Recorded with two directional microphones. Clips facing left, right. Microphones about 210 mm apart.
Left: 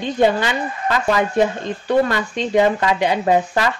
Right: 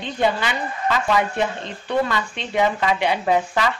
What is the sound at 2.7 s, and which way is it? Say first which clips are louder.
Speech: left 3 dB; 50° left (ahead or behind).